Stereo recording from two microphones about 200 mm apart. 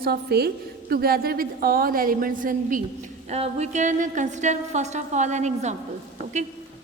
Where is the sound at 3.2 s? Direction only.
30° right (ahead or behind).